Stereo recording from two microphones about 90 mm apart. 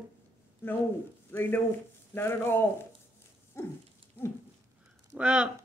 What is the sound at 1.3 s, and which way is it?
Speech, 25° left (ahead or behind).